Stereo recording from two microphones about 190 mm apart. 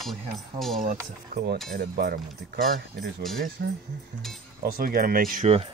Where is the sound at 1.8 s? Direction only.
55° right (ahead or behind).